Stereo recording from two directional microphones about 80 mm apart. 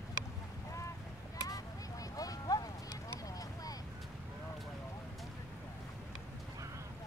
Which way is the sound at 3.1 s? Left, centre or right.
Left.